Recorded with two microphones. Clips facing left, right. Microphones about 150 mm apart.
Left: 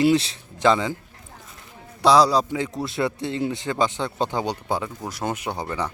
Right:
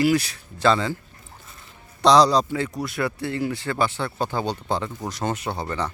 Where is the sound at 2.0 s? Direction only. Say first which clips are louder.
Right 1 dB; 5° left (ahead or behind).